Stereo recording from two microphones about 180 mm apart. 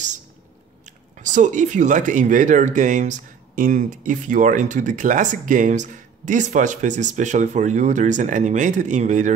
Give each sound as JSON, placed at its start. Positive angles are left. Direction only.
{"t": 0.8, "sound": "speech", "side_deg": -45}